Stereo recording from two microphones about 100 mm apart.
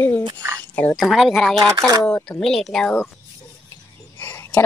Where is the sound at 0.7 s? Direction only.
20° left (ahead or behind).